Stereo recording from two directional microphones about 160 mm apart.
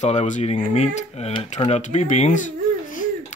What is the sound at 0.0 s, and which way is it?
Speech, 45° left (ahead or behind).